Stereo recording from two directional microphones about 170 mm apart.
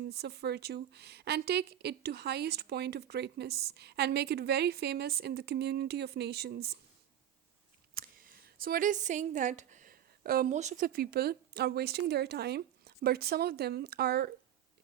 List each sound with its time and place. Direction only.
0.0 s a woman's voice: 70° right (ahead or behind)
7.9 s speech: 60° right (ahead or behind)